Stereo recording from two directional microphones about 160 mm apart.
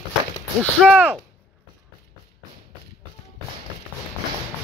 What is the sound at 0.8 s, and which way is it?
Speech, 10° right (ahead or behind).